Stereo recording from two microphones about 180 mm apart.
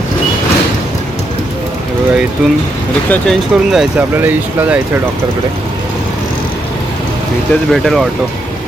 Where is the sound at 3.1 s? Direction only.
Centre (ahead or behind).